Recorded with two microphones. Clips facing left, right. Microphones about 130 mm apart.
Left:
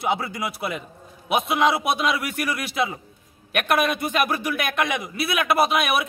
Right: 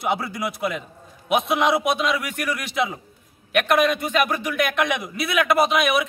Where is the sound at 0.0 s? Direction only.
Centre (ahead or behind).